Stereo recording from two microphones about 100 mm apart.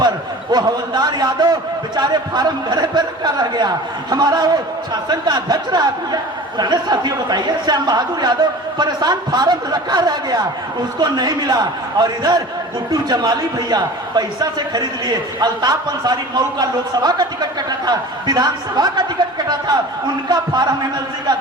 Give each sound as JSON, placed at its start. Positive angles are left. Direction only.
{"t": 0.5, "sound": "a man's voice", "side_deg": -45}